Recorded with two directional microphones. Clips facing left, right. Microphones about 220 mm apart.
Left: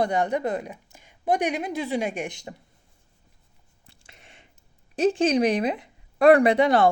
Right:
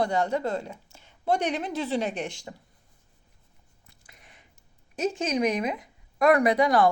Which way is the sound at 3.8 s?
30° left (ahead or behind).